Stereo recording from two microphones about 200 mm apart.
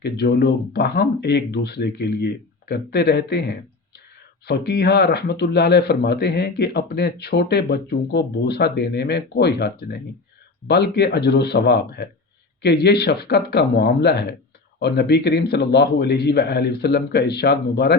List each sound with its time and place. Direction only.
0.0 s speech: 55° left (ahead or behind)